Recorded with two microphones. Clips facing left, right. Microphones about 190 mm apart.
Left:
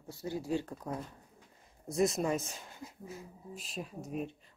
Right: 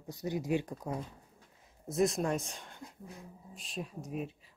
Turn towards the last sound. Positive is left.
turn(degrees=0)  # may be behind; listen again after turning